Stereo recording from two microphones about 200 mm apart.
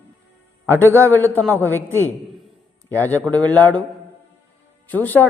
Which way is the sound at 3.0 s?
10° left (ahead or behind).